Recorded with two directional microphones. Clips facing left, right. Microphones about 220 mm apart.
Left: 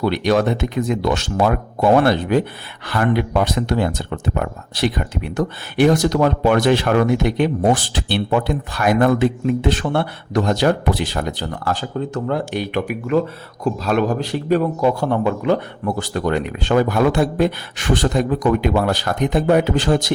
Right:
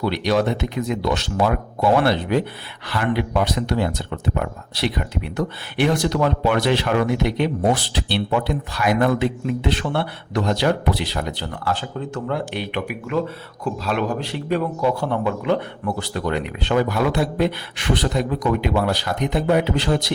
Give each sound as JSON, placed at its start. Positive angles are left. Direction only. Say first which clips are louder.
{"t": 0.0, "sound": "a man's voice", "louder": "left 3 dB", "side_deg": 50}